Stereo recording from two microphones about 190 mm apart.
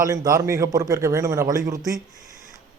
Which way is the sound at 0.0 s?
15° right (ahead or behind).